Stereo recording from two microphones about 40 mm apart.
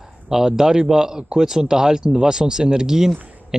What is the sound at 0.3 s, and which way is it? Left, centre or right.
Speech, centre.